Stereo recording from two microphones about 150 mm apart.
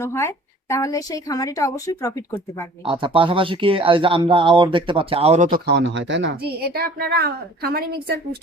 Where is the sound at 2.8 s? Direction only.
35° right (ahead or behind).